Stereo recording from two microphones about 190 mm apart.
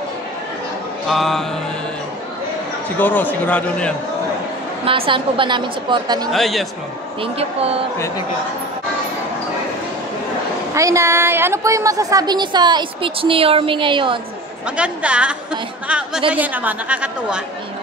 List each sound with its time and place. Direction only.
1.0 s music: centre (ahead or behind)
3.0 s a man's voice: 10° left (ahead or behind)
4.8 s a woman's voice: 30° right (ahead or behind)
6.3 s music: centre (ahead or behind)
7.3 s speech: 30° right (ahead or behind)
10.7 s a woman's voice: 15° right (ahead or behind)
14.8 s a woman's voice: 5° right (ahead or behind)